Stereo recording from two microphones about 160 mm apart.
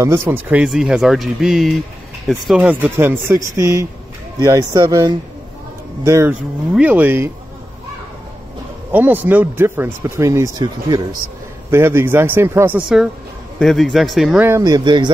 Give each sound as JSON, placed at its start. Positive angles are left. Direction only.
{"t": 0.0, "sound": "speech", "side_deg": -15}
{"t": 8.9, "sound": "speech", "side_deg": -10}
{"t": 11.7, "sound": "speech", "side_deg": -15}
{"t": 14.4, "sound": "speech", "side_deg": -20}